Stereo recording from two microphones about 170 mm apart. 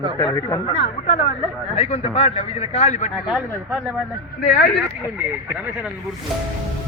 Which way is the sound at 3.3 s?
5° right (ahead or behind).